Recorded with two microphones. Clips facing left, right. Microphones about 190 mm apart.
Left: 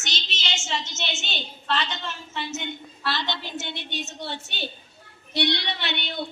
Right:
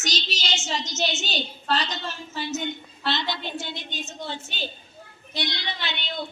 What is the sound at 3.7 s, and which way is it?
Speech, 65° left (ahead or behind).